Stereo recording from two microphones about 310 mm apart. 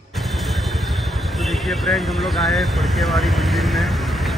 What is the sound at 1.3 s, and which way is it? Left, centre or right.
Vehicle, centre.